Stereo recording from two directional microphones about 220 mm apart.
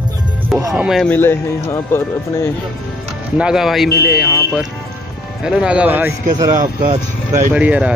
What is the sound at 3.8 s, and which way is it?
Speech, 45° left (ahead or behind).